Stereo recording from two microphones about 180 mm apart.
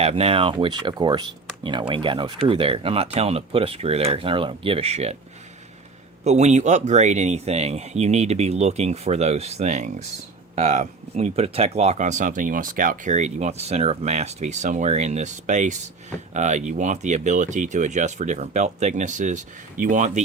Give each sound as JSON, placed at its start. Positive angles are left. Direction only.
{"t": 0.0, "sound": "speech", "side_deg": -35}
{"t": 6.2, "sound": "speech", "side_deg": -40}